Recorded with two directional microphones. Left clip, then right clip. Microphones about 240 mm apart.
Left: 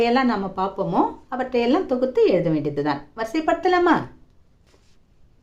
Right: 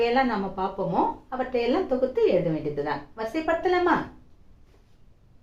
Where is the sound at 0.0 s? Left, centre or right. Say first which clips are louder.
Left 3 dB; left.